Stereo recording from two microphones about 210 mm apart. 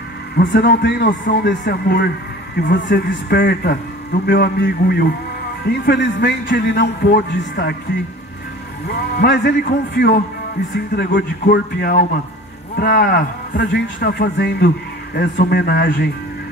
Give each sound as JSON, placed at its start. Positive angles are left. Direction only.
{"t": 0.4, "sound": "a man's voice", "side_deg": 45}
{"t": 8.8, "sound": "a man's voice", "side_deg": 50}